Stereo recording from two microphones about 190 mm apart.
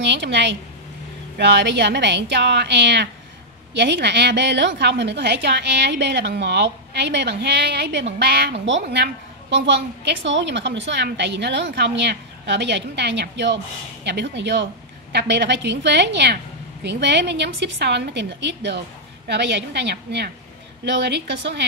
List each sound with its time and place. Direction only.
0.0 s a woman's voice: 65° right (ahead or behind)